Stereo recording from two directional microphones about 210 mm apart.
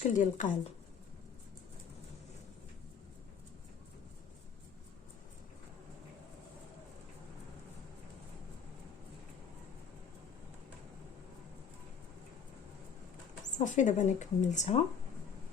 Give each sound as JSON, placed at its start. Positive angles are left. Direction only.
{"t": 0.0, "sound": "speech", "side_deg": 35}
{"t": 13.6, "sound": "speech", "side_deg": 35}